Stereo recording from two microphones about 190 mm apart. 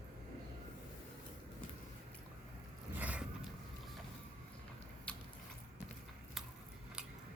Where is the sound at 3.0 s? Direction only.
10° right (ahead or behind).